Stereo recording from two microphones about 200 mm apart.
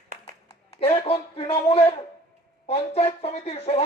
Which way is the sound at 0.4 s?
30° left (ahead or behind).